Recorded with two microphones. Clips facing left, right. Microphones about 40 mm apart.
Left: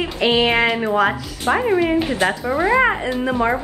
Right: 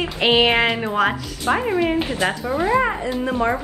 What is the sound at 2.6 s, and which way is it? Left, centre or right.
Speech, left.